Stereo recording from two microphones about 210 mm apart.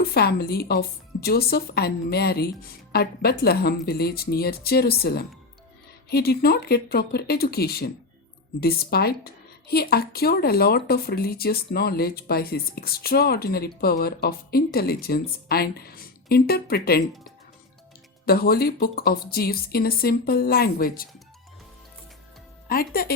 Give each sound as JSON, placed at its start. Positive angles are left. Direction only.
{"t": 0.0, "sound": "a woman's voice", "side_deg": 50}
{"t": 18.3, "sound": "a woman's voice", "side_deg": 45}
{"t": 22.7, "sound": "a woman's voice", "side_deg": 45}